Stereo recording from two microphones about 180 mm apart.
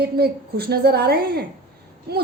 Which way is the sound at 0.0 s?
60° right (ahead or behind).